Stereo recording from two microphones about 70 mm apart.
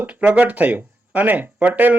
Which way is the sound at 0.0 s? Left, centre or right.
Right.